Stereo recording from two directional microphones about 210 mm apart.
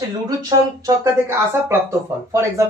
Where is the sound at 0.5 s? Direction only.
20° right (ahead or behind).